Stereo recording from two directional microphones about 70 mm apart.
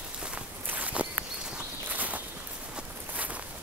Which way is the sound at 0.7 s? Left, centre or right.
Right.